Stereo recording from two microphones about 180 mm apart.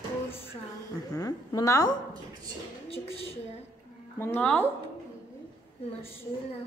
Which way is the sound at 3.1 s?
35° left (ahead or behind).